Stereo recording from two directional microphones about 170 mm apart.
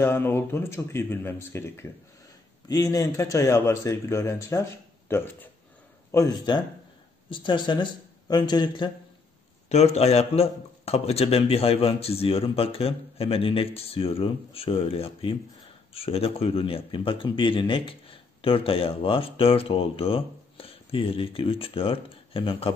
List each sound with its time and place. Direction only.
0.0 s a man's voice: 15° left (ahead or behind)
9.7 s speech: 40° left (ahead or behind)